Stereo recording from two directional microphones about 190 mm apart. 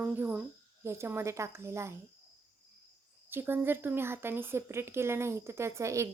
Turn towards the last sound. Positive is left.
turn(degrees=-15)  # may be behind; listen again after turning